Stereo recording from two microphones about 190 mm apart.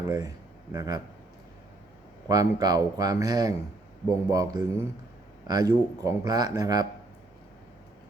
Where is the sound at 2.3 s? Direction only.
20° right (ahead or behind).